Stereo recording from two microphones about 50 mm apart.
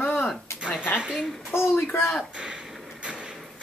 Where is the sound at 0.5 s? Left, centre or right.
Left.